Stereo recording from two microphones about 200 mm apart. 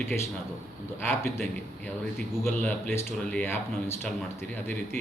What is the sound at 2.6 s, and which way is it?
Speech, 5° left (ahead or behind).